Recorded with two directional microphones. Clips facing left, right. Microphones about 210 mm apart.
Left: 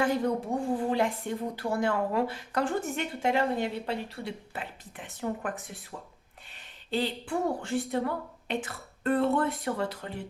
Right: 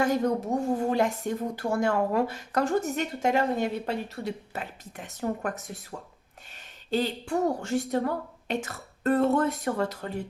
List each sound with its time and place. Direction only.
0.0 s speech: 45° right (ahead or behind)
6.9 s speech: 45° right (ahead or behind)